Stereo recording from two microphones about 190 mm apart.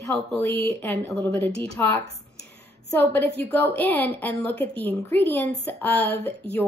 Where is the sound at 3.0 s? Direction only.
10° left (ahead or behind).